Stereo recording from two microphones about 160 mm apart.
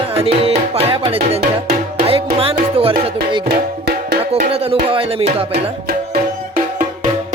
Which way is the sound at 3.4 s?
90° right.